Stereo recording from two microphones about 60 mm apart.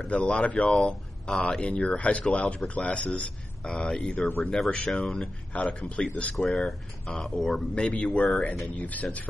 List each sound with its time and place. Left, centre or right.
0.0 s speech: centre
6.3 s speech: centre
7.7 s speech: centre
8.7 s speech: left